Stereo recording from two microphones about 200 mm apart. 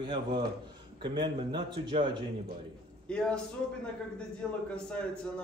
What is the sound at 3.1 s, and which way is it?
A man's voice, 5° left (ahead or behind).